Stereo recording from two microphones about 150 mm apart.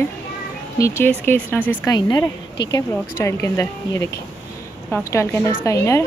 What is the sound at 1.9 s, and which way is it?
A woman's voice, 25° left (ahead or behind).